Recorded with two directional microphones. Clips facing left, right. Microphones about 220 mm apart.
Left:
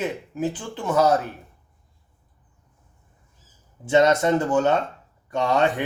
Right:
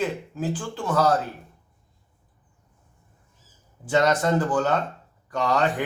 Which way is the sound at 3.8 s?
25° left (ahead or behind).